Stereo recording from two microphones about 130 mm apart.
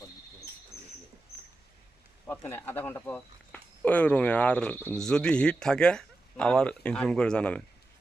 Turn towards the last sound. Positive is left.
turn(degrees=10)  # may be behind; listen again after turning